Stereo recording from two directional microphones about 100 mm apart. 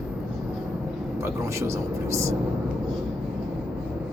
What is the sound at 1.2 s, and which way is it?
Speech, 30° right (ahead or behind).